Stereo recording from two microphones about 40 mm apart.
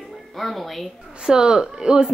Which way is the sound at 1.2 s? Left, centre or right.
Centre.